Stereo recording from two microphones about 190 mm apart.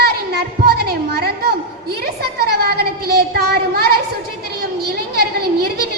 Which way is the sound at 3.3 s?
55° right (ahead or behind).